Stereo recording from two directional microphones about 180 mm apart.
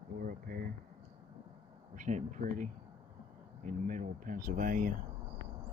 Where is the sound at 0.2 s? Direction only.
55° right (ahead or behind).